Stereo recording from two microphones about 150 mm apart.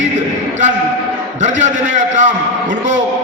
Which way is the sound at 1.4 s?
55° right (ahead or behind).